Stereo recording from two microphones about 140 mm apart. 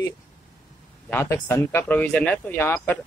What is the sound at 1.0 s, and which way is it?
Speech, 15° left (ahead or behind).